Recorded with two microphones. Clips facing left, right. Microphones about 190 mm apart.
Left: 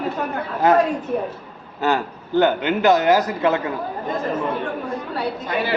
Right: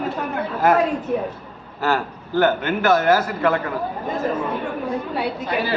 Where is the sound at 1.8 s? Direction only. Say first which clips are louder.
Left 1 dB; 20° left (ahead or behind).